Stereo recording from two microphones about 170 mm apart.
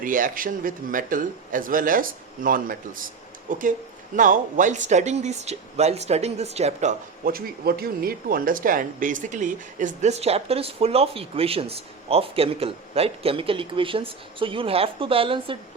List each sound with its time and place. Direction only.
0.0 s a man's voice: 50° right (ahead or behind)
7.3 s a man's voice: 60° right (ahead or behind); by 15.5 s 30° right (ahead or behind)